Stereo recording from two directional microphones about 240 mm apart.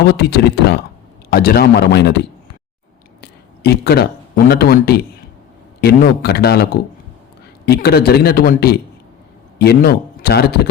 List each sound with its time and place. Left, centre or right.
0.1 s a man's voice: left
3.2 s a sound: left
4.4 s a man's voice: left